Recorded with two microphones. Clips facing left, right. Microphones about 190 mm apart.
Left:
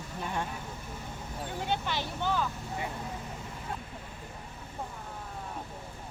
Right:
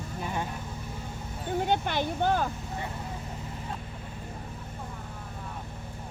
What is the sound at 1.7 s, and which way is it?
Speech, 50° right (ahead or behind).